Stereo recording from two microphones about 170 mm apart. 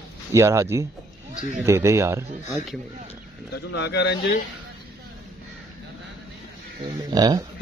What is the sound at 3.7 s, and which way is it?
Speech, 90° left.